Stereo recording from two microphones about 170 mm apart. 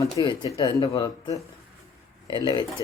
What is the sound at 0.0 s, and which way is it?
Speech, 25° left (ahead or behind).